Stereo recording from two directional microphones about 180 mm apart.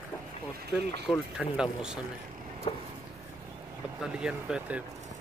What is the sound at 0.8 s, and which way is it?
Speech, 65° right (ahead or behind).